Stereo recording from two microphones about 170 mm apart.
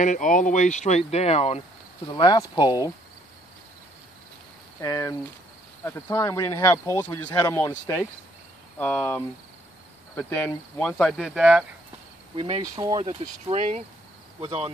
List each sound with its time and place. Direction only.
0.0 s speech: 50° left (ahead or behind)
2.1 s speech: 25° left (ahead or behind)
4.8 s speech: 20° left (ahead or behind)
8.7 s speech: 10° left (ahead or behind)
12.4 s speech: 35° right (ahead or behind)
12.7 s speech: 20° right (ahead or behind)
13.5 s speech: 40° right (ahead or behind)